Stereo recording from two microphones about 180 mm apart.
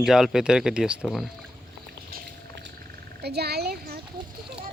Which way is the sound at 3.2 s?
65° right (ahead or behind).